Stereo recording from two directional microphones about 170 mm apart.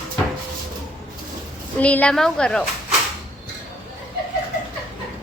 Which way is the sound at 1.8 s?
10° left (ahead or behind).